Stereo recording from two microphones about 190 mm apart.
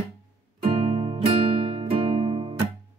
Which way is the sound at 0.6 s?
30° right (ahead or behind).